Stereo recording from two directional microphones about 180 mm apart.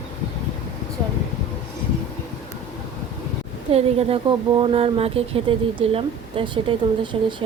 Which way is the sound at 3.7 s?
35° right (ahead or behind).